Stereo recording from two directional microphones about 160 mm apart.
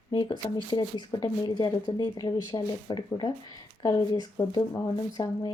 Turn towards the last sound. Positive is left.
turn(degrees=20)  # may be behind; listen again after turning